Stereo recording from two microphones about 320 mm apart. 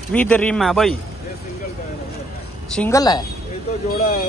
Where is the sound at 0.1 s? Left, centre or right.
Centre.